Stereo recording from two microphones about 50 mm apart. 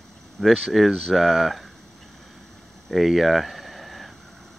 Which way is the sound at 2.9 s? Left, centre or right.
Centre.